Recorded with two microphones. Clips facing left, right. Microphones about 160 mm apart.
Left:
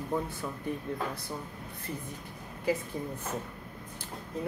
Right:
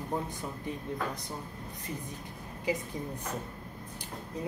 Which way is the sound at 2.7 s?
15° right (ahead or behind).